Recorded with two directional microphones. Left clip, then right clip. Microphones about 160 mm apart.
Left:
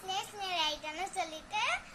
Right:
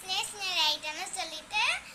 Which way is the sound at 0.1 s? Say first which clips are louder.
Right 4 dB; 50° left (ahead or behind).